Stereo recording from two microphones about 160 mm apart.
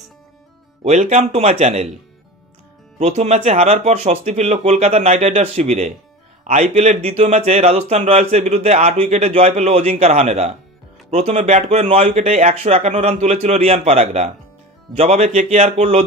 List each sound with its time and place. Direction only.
0.8 s a man's voice: 45° right (ahead or behind)
3.0 s a man's voice: 45° right (ahead or behind)